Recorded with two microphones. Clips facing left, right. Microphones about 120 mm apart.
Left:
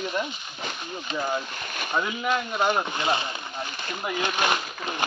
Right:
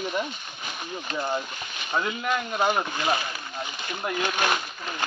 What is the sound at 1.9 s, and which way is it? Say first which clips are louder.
Speech: left 1 dB; 5° left (ahead or behind).